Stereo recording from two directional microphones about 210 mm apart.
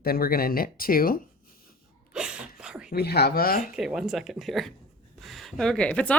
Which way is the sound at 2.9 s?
50° left (ahead or behind).